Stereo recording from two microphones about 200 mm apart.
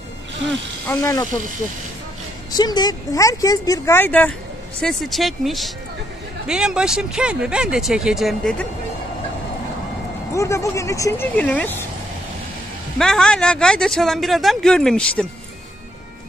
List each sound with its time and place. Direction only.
0.8 s speech: 15° left (ahead or behind)
2.5 s speech: 20° left (ahead or behind); by 8.6 s centre (ahead or behind)
10.3 s speech: 15° left (ahead or behind)
13.0 s speech: 5° left (ahead or behind)